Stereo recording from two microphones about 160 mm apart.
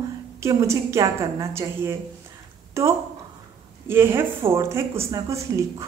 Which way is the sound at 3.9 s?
15° right (ahead or behind).